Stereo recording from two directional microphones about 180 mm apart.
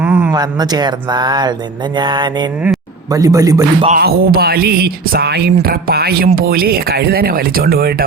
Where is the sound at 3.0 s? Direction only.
20° right (ahead or behind).